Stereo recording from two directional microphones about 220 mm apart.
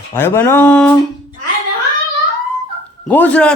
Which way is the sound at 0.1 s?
10° left (ahead or behind).